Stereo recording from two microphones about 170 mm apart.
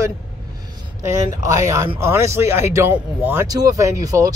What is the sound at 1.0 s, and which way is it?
Speech, 20° right (ahead or behind).